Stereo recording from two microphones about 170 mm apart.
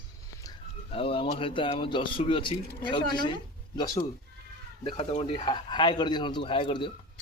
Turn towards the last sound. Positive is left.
turn(degrees=30)  # may be behind; listen again after turning